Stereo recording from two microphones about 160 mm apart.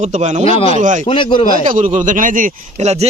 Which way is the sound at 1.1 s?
30° left (ahead or behind).